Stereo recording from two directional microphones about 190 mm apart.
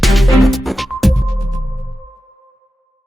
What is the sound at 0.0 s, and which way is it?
Music, centre (ahead or behind).